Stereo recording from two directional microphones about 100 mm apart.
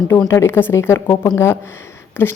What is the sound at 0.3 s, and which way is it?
Speech, 30° left (ahead or behind).